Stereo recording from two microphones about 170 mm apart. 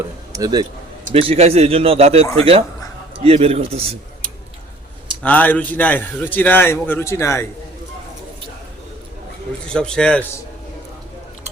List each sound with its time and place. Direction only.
0.3 s a man's voice: 20° right (ahead or behind)
1.1 s speech: 35° right (ahead or behind)
5.2 s a man's voice: 10° left (ahead or behind)
9.6 s speech: 5° left (ahead or behind)